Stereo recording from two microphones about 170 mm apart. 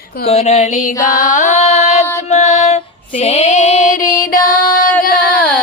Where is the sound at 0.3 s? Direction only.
40° left (ahead or behind).